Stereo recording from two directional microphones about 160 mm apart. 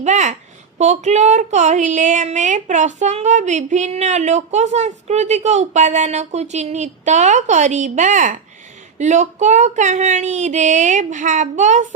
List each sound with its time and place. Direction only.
0.0 s speech: 45° right (ahead or behind)